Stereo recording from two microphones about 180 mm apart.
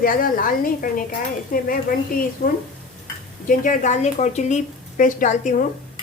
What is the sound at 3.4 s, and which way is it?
A woman's voice, 45° left (ahead or behind).